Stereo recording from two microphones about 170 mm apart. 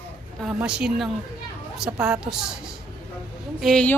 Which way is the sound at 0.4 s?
5° right (ahead or behind).